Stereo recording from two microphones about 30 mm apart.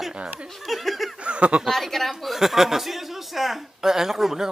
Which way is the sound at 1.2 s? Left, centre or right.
Right.